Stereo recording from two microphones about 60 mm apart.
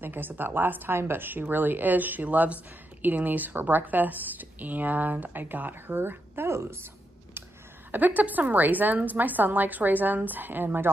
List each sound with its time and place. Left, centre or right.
0.0 s speech: right
7.9 s a woman's voice: right